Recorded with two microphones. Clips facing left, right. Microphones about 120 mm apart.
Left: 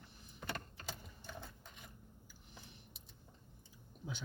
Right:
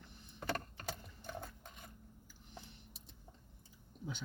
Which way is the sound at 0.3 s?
50° right (ahead or behind).